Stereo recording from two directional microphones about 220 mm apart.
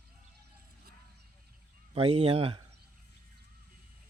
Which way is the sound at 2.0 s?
25° right (ahead or behind).